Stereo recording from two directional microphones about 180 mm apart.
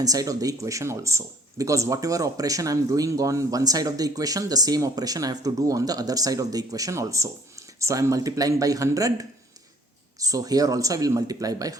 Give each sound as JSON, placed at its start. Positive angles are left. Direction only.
{"t": 0.0, "sound": "speech", "side_deg": -20}
{"t": 10.2, "sound": "speech", "side_deg": -20}